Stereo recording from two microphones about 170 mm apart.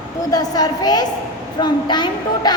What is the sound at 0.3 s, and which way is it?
A woman's voice, 25° left (ahead or behind).